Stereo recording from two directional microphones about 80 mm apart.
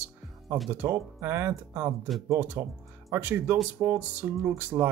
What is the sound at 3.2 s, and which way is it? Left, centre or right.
Speech, right.